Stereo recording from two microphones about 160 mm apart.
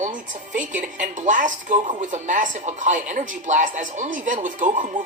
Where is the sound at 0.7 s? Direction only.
50° right (ahead or behind).